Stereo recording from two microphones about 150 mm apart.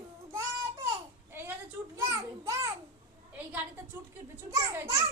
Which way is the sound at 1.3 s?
15° right (ahead or behind).